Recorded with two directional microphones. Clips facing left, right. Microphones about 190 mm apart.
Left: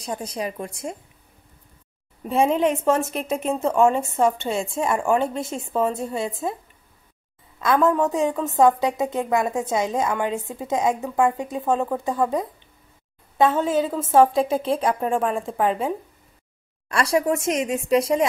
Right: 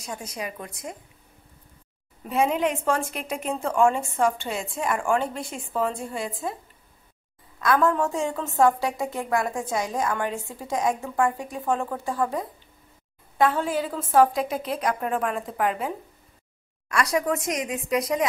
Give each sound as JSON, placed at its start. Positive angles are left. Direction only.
{"t": 0.0, "sound": "a woman's voice", "side_deg": 35}
{"t": 2.2, "sound": "a woman's voice", "side_deg": 25}
{"t": 7.6, "sound": "a woman's voice", "side_deg": 20}
{"t": 16.9, "sound": "a woman's voice", "side_deg": 30}